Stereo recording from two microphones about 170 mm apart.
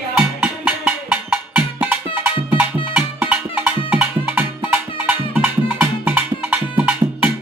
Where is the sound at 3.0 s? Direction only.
10° right (ahead or behind).